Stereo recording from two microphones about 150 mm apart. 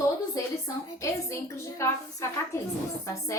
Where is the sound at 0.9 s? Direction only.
20° left (ahead or behind).